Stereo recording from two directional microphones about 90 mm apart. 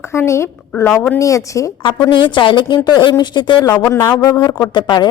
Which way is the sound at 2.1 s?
60° left (ahead or behind).